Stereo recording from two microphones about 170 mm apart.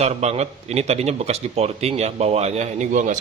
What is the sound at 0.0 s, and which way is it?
Speech, 40° right (ahead or behind).